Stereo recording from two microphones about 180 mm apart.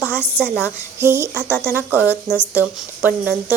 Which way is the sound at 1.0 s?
10° right (ahead or behind).